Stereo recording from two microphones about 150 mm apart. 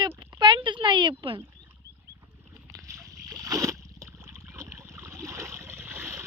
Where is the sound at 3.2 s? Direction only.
25° right (ahead or behind).